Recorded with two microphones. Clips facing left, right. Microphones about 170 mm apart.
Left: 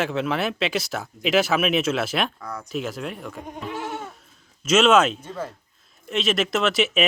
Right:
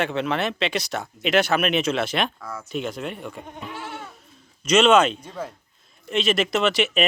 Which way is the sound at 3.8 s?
40° left (ahead or behind).